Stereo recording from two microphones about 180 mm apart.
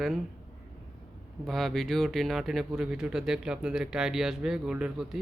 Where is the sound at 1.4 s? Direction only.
Centre (ahead or behind).